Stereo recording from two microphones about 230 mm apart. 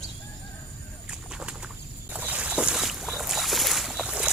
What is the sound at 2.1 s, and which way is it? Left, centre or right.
Boat, centre.